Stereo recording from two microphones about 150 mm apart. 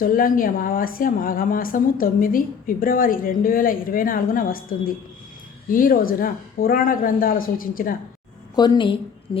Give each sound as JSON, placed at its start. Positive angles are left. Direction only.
{"t": 0.0, "sound": "a woman's voice", "side_deg": 70}
{"t": 8.5, "sound": "a woman's voice", "side_deg": 25}